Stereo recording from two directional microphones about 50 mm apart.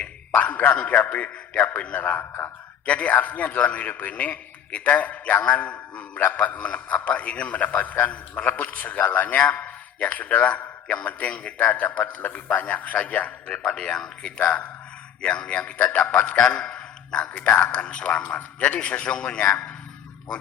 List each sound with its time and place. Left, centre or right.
0.0 s a man's voice: left
13.5 s a man's voice: centre
16.4 s a man's voice: centre